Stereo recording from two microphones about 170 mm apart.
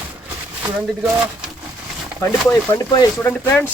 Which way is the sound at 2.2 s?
15° left (ahead or behind).